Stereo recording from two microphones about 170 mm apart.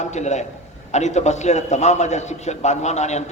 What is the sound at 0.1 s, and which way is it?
A man's voice, 40° left (ahead or behind).